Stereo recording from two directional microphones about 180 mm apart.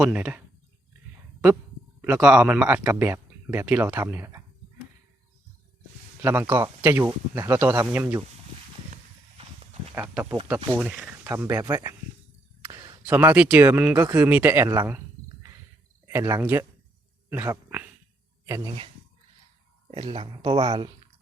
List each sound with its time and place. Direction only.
0.0 s speech: 5° right (ahead or behind)
2.0 s speech: 10° right (ahead or behind)
6.2 s speech: 10° right (ahead or behind)
9.9 s speech: 10° right (ahead or behind)
16.0 s speech: 15° right (ahead or behind)
19.9 s speech: 30° right (ahead or behind)